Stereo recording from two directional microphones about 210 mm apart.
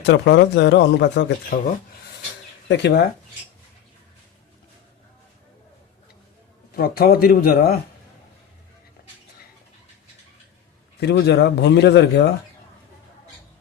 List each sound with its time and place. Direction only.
0.0 s speech: 55° left (ahead or behind)
2.6 s speech: 55° left (ahead or behind)
6.7 s speech: 45° left (ahead or behind)
11.0 s speech: 55° left (ahead or behind)